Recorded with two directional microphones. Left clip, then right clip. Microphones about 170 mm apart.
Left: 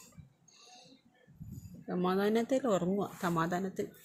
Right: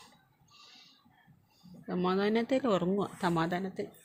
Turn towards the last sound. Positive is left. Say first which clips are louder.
# right 2 dB
turn(degrees=-5)  # may be behind; listen again after turning